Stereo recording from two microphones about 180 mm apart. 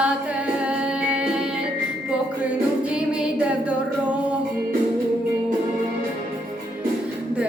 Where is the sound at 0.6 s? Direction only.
5° right (ahead or behind).